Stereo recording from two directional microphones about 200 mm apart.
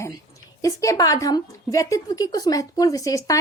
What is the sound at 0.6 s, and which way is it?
Speech, 15° left (ahead or behind).